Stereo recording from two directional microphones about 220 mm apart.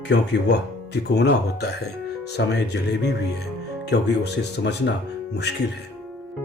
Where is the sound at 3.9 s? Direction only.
50° left (ahead or behind).